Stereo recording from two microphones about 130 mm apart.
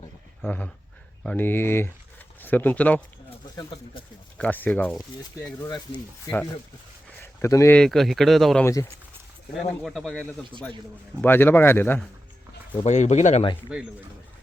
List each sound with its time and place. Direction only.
0.4 s speech: 10° left (ahead or behind)
4.4 s speech: 10° left (ahead or behind)
6.3 s speech: 35° left (ahead or behind)
7.2 s a sound: 20° left (ahead or behind)
7.8 s speech: centre (ahead or behind)
8.6 s speech: 20° left (ahead or behind)
9.8 s speech: centre (ahead or behind)
11.2 s speech: 15° left (ahead or behind)
12.8 s speech: 60° left (ahead or behind)